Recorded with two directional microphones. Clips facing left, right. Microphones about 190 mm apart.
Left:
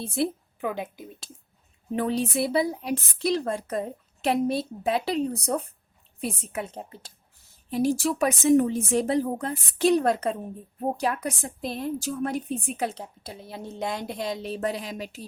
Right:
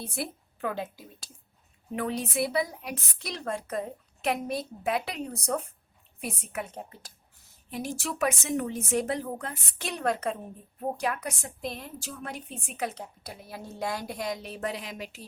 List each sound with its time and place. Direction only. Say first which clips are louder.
0.0 s a woman's voice: left 8 dB; 25° left (ahead or behind)
0.6 s speech: left 2 dB; 15° left (ahead or behind)
2.0 s a woman's voice: left 4 dB; 30° left (ahead or behind)